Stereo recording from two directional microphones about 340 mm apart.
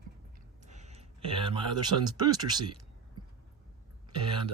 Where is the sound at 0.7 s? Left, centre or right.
Centre.